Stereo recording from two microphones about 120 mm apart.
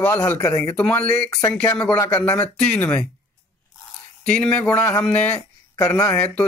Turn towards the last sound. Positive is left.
turn(degrees=10)  # may be behind; listen again after turning